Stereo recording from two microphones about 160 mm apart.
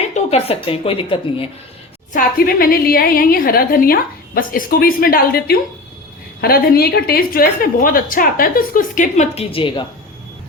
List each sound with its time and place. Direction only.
0.1 s a woman's voice: 40° left (ahead or behind)
2.1 s a woman's voice: 70° left (ahead or behind); by 9.8 s 35° left (ahead or behind)